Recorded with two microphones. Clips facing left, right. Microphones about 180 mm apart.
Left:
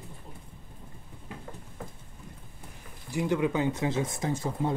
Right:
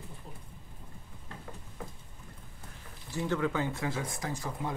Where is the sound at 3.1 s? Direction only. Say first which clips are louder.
Left 4 dB; 15° left (ahead or behind).